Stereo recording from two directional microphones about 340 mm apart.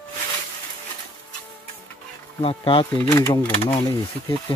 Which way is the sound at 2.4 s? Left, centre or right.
Centre.